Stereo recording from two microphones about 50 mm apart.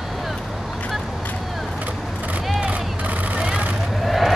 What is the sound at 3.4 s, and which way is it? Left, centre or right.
Vehicle, right.